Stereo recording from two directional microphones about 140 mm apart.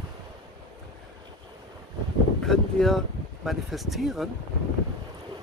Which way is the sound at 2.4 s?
Centre (ahead or behind).